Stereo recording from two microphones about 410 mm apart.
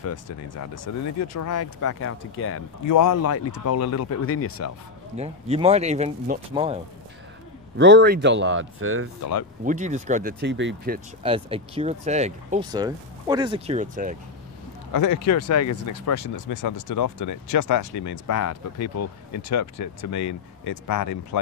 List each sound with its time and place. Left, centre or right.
0.0 s speech: left
2.9 s speech: left
5.1 s speech: centre
7.7 s speech: right
9.7 s speech: centre
11.2 s speech: centre
14.9 s speech: left